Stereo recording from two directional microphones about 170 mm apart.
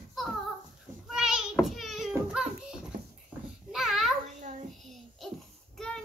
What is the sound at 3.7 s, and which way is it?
Babbling, centre (ahead or behind).